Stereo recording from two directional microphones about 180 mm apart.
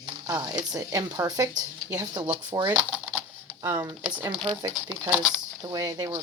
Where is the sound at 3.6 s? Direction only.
15° right (ahead or behind).